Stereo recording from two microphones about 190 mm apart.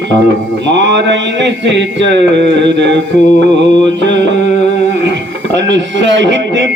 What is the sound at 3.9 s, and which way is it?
Mantra, 70° right (ahead or behind).